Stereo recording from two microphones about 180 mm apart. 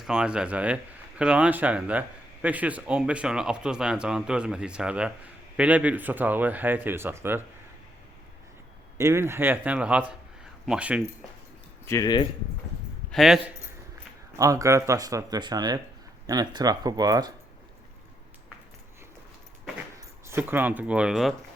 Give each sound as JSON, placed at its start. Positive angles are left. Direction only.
{"t": 0.0, "sound": "a man's voice", "side_deg": -5}
{"t": 9.0, "sound": "a man's voice", "side_deg": -15}
{"t": 11.9, "sound": "speech", "side_deg": 20}
{"t": 13.1, "sound": "speech", "side_deg": 0}
{"t": 14.3, "sound": "speech", "side_deg": -20}
{"t": 20.0, "sound": "speech", "side_deg": -15}